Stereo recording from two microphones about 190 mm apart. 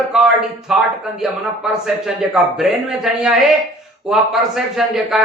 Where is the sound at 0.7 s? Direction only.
5° right (ahead or behind).